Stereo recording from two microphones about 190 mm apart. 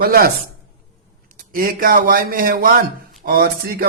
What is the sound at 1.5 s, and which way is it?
Speech, 50° right (ahead or behind).